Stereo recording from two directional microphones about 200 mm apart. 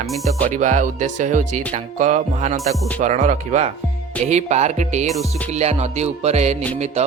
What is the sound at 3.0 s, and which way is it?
Speech, 40° right (ahead or behind).